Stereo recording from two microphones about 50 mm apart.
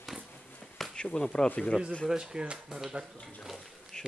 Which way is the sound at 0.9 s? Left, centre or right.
Centre.